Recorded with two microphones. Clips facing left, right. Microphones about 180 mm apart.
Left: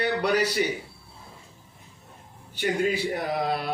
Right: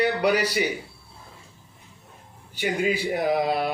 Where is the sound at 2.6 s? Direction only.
5° right (ahead or behind).